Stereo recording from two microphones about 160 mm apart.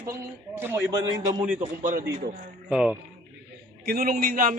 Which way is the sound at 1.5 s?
50° right (ahead or behind).